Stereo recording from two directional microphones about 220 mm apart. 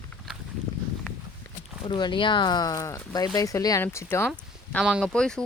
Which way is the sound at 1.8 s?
20° left (ahead or behind).